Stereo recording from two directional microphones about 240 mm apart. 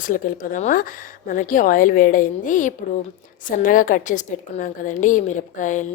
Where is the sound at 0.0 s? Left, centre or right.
Left.